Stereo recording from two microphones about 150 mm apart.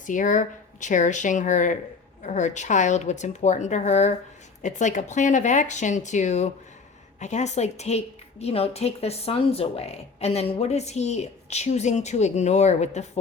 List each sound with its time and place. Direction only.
0.0 s a woman's voice: 60° left (ahead or behind)